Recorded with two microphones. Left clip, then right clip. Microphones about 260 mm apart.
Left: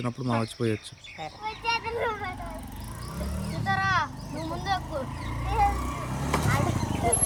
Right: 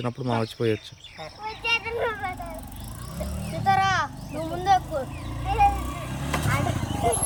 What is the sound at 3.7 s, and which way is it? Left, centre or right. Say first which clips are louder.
Vehicle: right 4 dB; centre.